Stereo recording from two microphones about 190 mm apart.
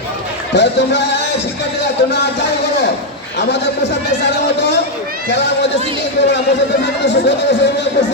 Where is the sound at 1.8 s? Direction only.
65° left (ahead or behind).